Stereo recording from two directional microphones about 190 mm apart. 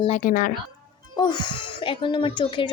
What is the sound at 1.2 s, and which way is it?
Speech, 25° left (ahead or behind).